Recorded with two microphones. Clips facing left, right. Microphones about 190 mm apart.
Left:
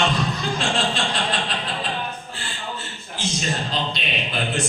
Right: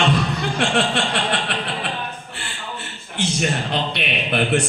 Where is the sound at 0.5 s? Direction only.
65° right (ahead or behind).